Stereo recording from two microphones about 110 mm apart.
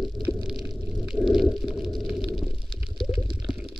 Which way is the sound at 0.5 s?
5° right (ahead or behind).